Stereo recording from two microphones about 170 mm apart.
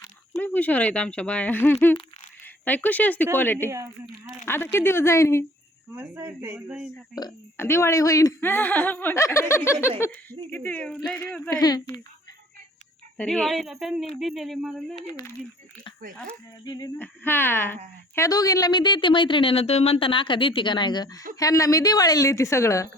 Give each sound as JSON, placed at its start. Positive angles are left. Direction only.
{"t": 0.3, "sound": "speech", "side_deg": 10}
{"t": 5.9, "sound": "speech", "side_deg": -15}
{"t": 7.2, "sound": "speech", "side_deg": 20}
{"t": 13.1, "sound": "speech", "side_deg": 5}
{"t": 15.0, "sound": "speech", "side_deg": 20}
{"t": 16.6, "sound": "speech", "side_deg": 25}
{"t": 17.0, "sound": "speech", "side_deg": 10}